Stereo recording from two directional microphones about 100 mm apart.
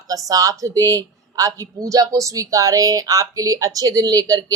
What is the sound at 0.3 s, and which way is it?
Speech, 35° right (ahead or behind).